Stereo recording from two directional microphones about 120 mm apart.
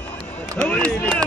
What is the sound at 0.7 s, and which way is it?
Chop, 10° left (ahead or behind).